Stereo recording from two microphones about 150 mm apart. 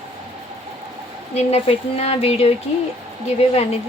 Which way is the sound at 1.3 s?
45° left (ahead or behind).